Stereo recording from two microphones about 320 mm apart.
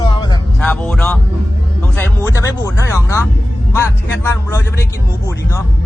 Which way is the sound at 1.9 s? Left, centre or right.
Centre.